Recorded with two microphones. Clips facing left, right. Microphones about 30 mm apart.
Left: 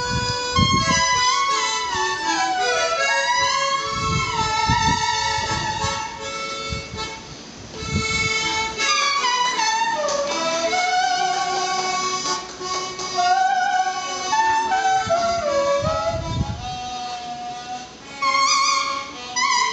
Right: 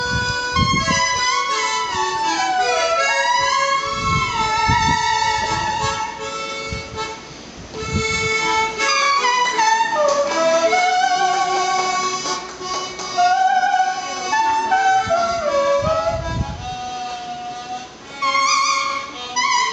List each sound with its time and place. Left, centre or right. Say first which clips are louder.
0.0 s music: right 3 dB; centre
2.9 s music: right 3 dB; centre
8.0 s music: right 2 dB; centre
9.0 s music: right 5 dB; centre
12.6 s music: right 1 dB; centre
15.8 s music: right 3 dB; centre
18.2 s music: right 1 dB; centre